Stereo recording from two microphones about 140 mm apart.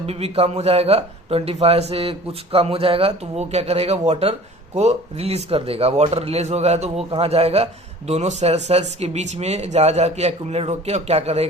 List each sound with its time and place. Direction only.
0.0 s speech: 45° right (ahead or behind)